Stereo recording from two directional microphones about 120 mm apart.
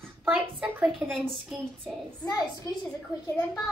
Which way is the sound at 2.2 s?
30° left (ahead or behind).